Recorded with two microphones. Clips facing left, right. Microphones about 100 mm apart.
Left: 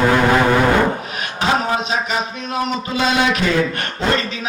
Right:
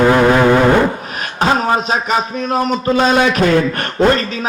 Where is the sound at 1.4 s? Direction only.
45° right (ahead or behind).